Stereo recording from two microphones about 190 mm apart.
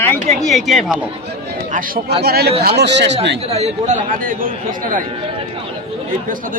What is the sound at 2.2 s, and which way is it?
Speech, 55° right (ahead or behind).